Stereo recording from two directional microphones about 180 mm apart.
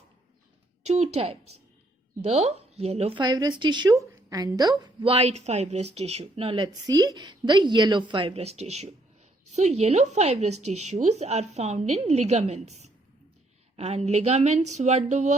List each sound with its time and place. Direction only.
0.9 s a woman's voice: 35° right (ahead or behind)